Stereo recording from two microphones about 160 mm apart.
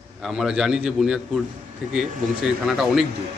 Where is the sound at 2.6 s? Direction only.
Centre (ahead or behind).